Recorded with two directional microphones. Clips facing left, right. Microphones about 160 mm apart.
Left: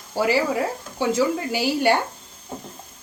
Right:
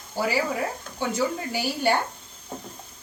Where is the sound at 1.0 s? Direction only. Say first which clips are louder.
Left 5 dB; 90° left.